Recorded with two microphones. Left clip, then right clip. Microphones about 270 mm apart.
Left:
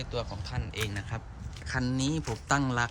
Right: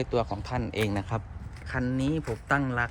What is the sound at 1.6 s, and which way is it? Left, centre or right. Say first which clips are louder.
Speech: right 1 dB; centre.